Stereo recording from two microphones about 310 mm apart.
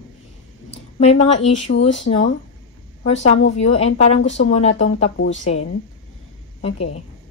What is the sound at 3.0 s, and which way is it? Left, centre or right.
Speech, left.